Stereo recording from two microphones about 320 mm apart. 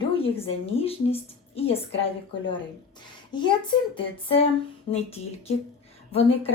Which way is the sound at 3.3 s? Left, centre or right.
Centre.